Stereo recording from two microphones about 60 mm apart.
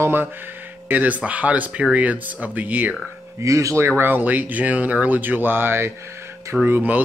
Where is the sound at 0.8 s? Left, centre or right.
Right.